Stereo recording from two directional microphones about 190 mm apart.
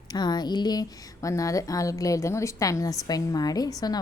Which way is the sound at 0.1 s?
20° left (ahead or behind).